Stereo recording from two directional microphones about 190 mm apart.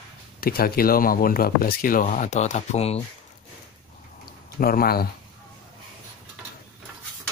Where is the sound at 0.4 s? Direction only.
50° left (ahead or behind); by 3.0 s 35° left (ahead or behind).